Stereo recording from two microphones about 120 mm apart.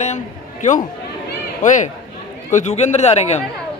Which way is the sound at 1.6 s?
90° left.